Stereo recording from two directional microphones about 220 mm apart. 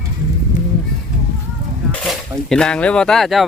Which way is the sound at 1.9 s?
Centre (ahead or behind).